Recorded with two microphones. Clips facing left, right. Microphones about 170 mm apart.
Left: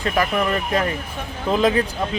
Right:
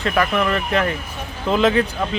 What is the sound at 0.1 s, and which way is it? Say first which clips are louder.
Speech: right 1 dB; 30° left (ahead or behind).